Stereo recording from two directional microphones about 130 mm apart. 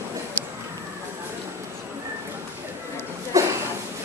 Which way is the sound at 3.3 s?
25° right (ahead or behind).